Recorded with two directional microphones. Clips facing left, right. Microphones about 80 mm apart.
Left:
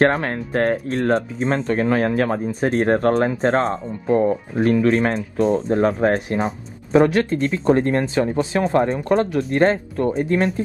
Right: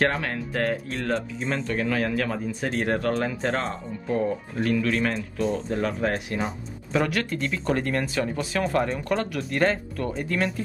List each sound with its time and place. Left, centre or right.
0.0 s speech: left